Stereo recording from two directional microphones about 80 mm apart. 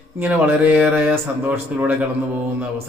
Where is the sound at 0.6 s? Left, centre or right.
Centre.